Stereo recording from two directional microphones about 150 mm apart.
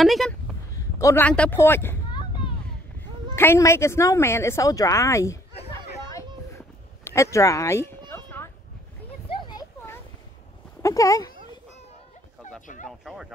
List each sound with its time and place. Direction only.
0.0 s speech: centre (ahead or behind)
0.7 s a man's voice: 20° left (ahead or behind)
3.3 s speech: 15° left (ahead or behind)
5.7 s a sound: 20° left (ahead or behind)
7.1 s speech: 20° left (ahead or behind)
8.1 s a sound: 15° left (ahead or behind)
9.3 s a sound: 30° left (ahead or behind)
10.8 s speech: 20° left (ahead or behind)
12.8 s speech: centre (ahead or behind)